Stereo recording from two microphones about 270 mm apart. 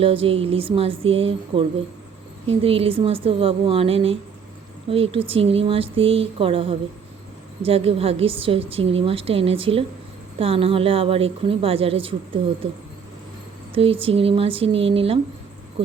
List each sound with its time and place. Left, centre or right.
0.0 s a woman's voice: right
13.7 s a woman's voice: centre